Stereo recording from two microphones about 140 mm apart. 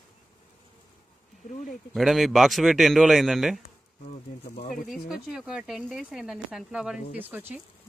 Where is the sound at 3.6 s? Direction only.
60° left (ahead or behind).